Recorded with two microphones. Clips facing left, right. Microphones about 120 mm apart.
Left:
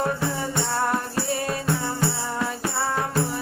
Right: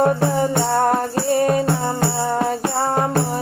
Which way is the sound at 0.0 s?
50° right (ahead or behind).